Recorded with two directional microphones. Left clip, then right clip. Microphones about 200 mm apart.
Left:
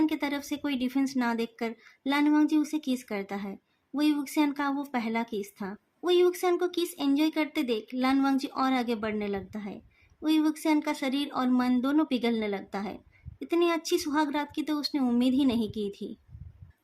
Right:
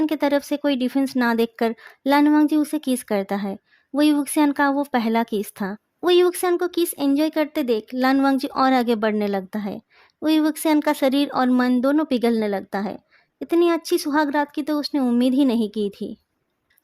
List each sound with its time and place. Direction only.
0.0 s speech: 45° right (ahead or behind)